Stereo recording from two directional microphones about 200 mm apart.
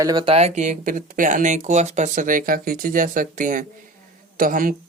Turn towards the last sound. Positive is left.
turn(degrees=-45)  # may be behind; listen again after turning